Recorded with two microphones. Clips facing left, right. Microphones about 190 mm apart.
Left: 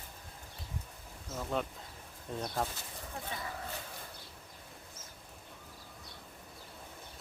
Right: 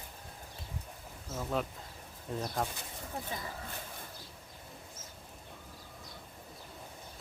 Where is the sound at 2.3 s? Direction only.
Centre (ahead or behind).